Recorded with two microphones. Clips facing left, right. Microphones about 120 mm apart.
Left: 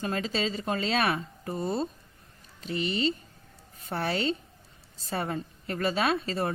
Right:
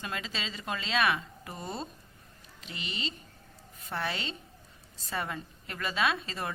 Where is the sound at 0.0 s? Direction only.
40° left (ahead or behind).